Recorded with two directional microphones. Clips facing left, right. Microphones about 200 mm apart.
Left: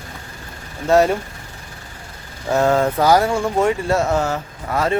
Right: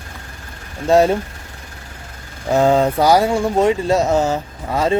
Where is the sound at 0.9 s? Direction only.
15° right (ahead or behind).